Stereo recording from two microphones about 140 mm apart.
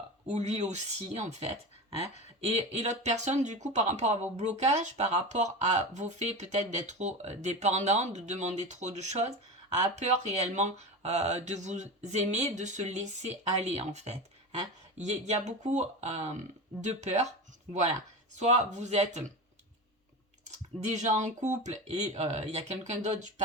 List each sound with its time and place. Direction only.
0.3 s speech: 50° right (ahead or behind)
18.3 s speech: 55° right (ahead or behind)
20.9 s speech: 60° right (ahead or behind)